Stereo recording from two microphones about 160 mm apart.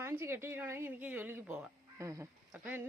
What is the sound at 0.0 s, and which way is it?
A woman's voice, 15° right (ahead or behind).